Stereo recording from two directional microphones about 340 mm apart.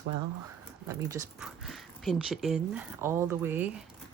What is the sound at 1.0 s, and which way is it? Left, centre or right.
Speech, centre.